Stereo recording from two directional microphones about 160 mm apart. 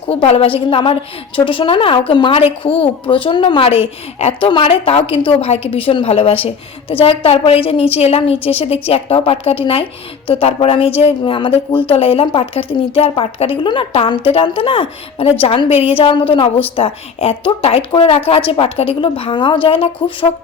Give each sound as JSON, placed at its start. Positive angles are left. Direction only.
{"t": 0.1, "sound": "a woman's voice", "side_deg": 40}